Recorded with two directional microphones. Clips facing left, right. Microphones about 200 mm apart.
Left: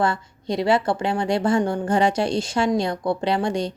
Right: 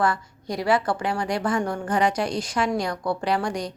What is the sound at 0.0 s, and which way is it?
A woman's voice, 25° left (ahead or behind).